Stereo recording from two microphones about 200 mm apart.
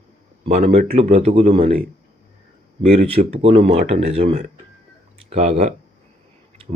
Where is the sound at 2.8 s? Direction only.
30° right (ahead or behind).